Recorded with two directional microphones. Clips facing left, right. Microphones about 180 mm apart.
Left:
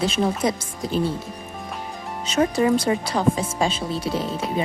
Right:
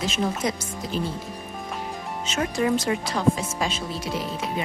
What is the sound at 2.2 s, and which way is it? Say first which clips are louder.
Speech: left 5 dB; 35° left (ahead or behind).